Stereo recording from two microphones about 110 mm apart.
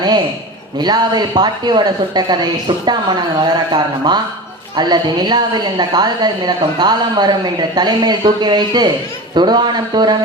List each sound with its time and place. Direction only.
0.8 s a woman's voice: 40° right (ahead or behind)